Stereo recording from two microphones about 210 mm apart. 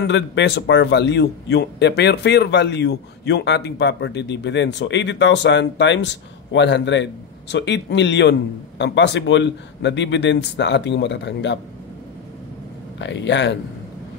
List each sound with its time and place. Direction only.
0.0 s a man's voice: 60° left (ahead or behind)
13.0 s a man's voice: 60° left (ahead or behind)